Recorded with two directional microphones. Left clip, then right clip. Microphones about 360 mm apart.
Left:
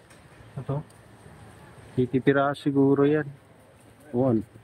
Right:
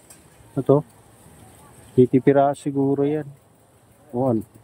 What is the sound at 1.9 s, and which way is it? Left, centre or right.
Speech, centre.